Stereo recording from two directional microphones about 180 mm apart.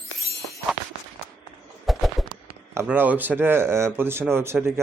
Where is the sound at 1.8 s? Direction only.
Centre (ahead or behind).